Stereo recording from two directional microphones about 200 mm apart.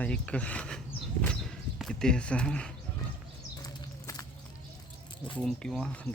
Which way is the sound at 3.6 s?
15° left (ahead or behind).